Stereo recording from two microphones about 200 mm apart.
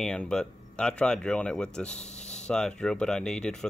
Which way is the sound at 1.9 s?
35° left (ahead or behind).